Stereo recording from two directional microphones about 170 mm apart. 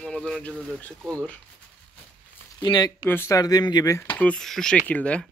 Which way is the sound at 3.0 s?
15° left (ahead or behind).